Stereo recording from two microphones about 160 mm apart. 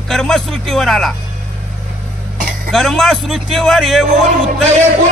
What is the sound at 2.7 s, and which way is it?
Speech, centre (ahead or behind).